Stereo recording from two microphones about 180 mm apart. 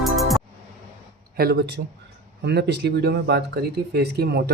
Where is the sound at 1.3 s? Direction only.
60° right (ahead or behind).